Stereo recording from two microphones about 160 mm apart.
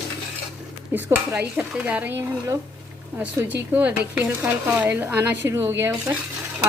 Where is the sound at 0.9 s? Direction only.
10° right (ahead or behind).